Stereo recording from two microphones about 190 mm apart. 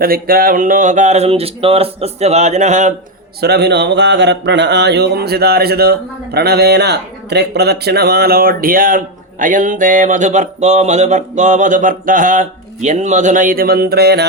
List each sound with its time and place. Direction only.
0.0 s speech: 50° right (ahead or behind)
3.4 s speech: 60° right (ahead or behind)
9.4 s mantra: 45° right (ahead or behind)